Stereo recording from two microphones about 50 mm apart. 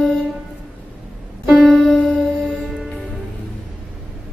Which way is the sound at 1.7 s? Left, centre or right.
Centre.